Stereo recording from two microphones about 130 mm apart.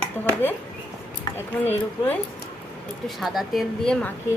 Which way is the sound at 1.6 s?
15° left (ahead or behind).